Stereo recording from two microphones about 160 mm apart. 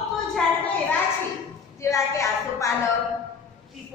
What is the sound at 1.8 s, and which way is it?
Speech, 20° left (ahead or behind).